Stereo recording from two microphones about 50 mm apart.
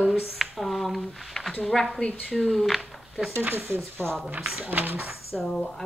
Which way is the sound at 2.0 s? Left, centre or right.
Left.